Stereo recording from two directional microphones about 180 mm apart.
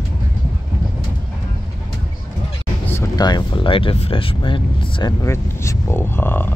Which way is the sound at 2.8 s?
15° left (ahead or behind).